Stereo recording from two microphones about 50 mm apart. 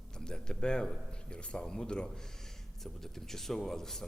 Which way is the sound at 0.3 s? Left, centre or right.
Centre.